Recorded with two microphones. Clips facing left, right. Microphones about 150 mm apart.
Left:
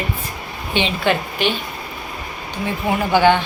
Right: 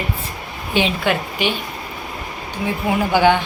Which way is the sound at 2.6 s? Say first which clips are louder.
Right 1 dB; 10° right (ahead or behind).